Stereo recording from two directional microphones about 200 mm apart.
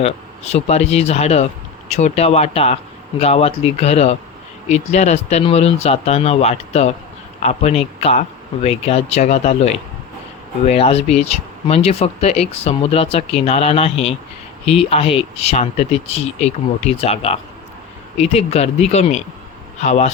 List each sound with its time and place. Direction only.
0.0 s speech: 30° left (ahead or behind)